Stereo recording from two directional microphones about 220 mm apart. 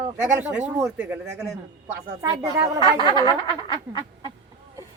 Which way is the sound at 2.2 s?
20° right (ahead or behind).